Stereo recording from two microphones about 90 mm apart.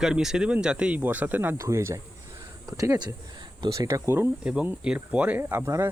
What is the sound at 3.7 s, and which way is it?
Speech, 40° right (ahead or behind).